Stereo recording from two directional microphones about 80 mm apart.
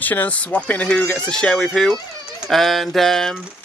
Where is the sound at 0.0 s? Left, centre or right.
Left.